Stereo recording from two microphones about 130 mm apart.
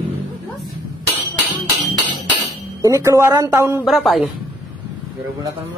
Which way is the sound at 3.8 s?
Centre (ahead or behind).